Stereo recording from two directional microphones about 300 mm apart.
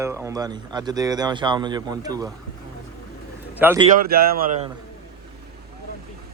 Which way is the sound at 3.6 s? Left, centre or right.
Centre.